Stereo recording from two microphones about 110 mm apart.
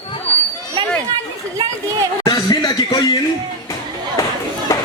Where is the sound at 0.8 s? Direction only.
55° right (ahead or behind).